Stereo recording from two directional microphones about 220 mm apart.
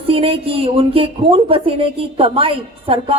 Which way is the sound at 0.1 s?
25° right (ahead or behind).